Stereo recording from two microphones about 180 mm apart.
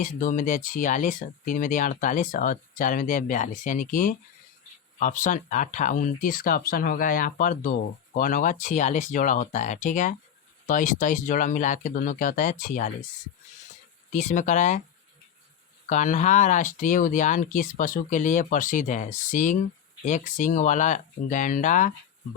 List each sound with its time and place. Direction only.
0.0 s speech: 45° left (ahead or behind)
14.1 s speech: 40° left (ahead or behind)
15.9 s speech: 40° left (ahead or behind)